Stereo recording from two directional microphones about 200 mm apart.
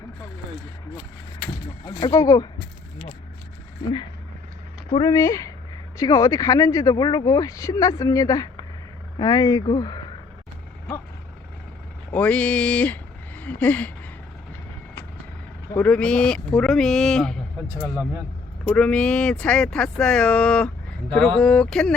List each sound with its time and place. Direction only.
1.9 s speech: 15° left (ahead or behind)
4.9 s speech: 20° left (ahead or behind)
12.1 s speech: 5° left (ahead or behind)
15.8 s speech: 5° left (ahead or behind)
18.7 s speech: 5° left (ahead or behind)